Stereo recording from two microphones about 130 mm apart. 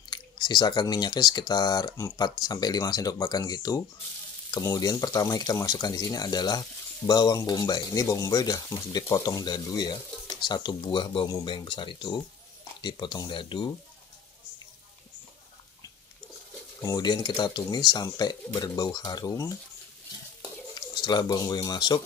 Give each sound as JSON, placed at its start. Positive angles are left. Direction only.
{"t": 0.1, "sound": "speech", "side_deg": 35}
{"t": 16.8, "sound": "speech", "side_deg": 30}
{"t": 20.7, "sound": "speech", "side_deg": 35}